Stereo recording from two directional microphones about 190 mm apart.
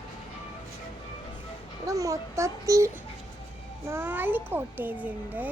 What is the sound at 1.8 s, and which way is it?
A child's voice, 15° right (ahead or behind).